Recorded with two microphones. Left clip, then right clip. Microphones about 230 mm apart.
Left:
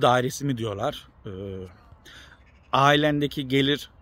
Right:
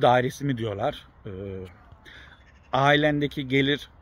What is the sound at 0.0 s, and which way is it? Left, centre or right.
A man's voice, centre.